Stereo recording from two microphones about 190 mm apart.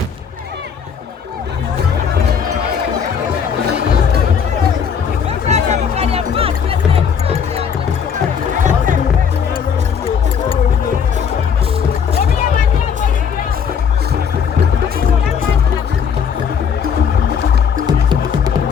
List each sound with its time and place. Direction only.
5.5 s music: 35° right (ahead or behind)